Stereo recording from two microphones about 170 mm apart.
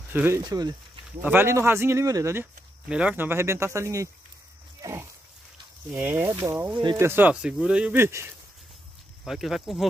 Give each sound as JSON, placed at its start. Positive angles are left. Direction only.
{"t": 0.1, "sound": "speech", "side_deg": -10}
{"t": 0.4, "sound": "speech", "side_deg": -25}
{"t": 1.2, "sound": "speech", "side_deg": -15}
{"t": 4.8, "sound": "a sound", "side_deg": -20}
{"t": 5.9, "sound": "speech", "side_deg": -10}
{"t": 9.2, "sound": "speech", "side_deg": 0}